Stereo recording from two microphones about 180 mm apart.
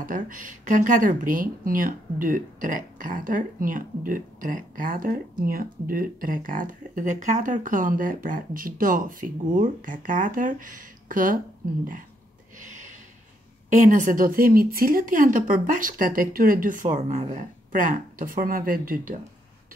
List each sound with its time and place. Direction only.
0.0 s speech: 50° right (ahead or behind)
12.5 s a sound: 45° right (ahead or behind)
13.7 s speech: 45° right (ahead or behind)